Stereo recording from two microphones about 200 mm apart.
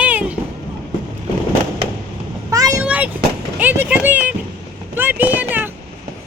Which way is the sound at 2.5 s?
15° right (ahead or behind).